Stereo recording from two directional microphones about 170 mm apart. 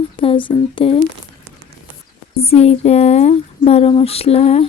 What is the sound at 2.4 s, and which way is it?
Speech, 35° left (ahead or behind).